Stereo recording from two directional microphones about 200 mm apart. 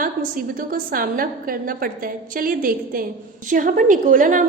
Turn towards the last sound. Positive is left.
turn(degrees=-40)  # may be behind; listen again after turning